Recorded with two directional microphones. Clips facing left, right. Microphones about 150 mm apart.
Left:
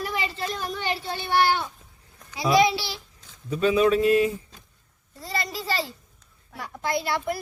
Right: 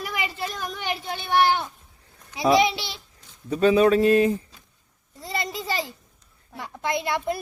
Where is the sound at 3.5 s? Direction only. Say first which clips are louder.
Right 3 dB; 35° right (ahead or behind).